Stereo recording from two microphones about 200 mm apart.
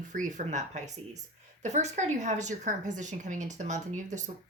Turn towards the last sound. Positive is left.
turn(degrees=-35)  # may be behind; listen again after turning